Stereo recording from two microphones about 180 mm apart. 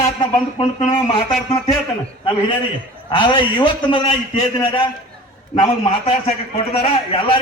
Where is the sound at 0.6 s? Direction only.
30° left (ahead or behind).